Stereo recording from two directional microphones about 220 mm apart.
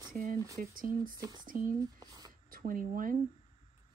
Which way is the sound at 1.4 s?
40° right (ahead or behind).